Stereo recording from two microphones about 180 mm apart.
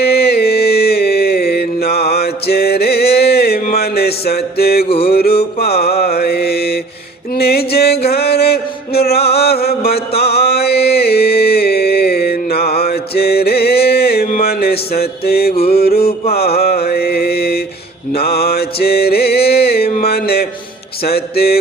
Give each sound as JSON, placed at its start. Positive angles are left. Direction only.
{"t": 0.0, "sound": "mantra", "side_deg": 60}
{"t": 4.9, "sound": "music", "side_deg": 35}
{"t": 5.1, "sound": "music", "side_deg": 60}
{"t": 5.5, "sound": "mantra", "side_deg": 60}
{"t": 7.3, "sound": "music", "side_deg": 60}
{"t": 9.4, "sound": "mantra", "side_deg": 60}
{"t": 20.1, "sound": "a sound", "side_deg": 60}
{"t": 21.0, "sound": "mantra", "side_deg": 60}